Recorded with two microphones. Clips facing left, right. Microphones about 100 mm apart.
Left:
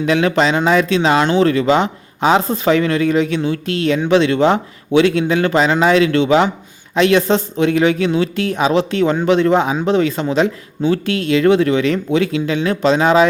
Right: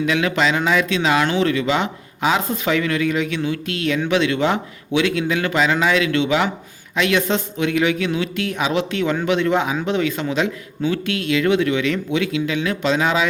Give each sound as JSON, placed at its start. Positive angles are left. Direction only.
{"t": 0.0, "sound": "speech", "side_deg": 35}